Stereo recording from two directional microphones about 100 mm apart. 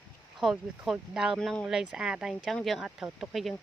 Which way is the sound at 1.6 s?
5° right (ahead or behind).